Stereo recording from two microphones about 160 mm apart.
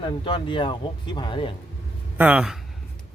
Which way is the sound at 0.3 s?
30° left (ahead or behind).